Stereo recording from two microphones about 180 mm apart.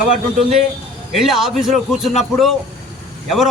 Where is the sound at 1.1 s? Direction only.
Centre (ahead or behind).